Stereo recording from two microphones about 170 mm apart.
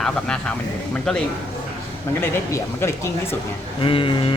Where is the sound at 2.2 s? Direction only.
15° left (ahead or behind).